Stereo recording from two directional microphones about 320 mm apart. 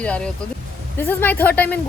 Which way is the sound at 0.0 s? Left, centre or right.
Centre.